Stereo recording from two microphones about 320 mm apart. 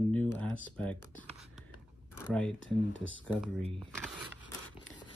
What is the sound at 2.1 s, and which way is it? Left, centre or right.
Speech, centre.